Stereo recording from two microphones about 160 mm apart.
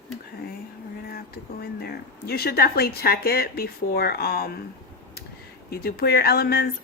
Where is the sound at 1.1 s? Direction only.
75° left (ahead or behind).